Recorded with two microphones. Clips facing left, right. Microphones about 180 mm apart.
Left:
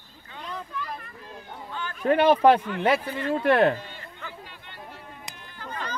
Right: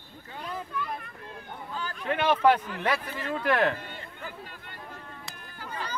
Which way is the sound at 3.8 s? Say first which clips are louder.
Even; 45° right (ahead or behind).